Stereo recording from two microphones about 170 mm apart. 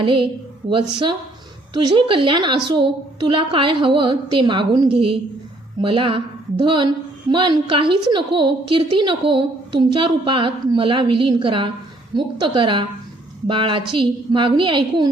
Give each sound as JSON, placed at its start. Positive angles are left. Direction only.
{"t": 0.0, "sound": "a woman's voice", "side_deg": -30}